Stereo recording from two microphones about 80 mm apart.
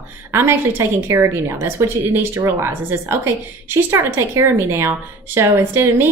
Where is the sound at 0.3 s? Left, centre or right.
Right.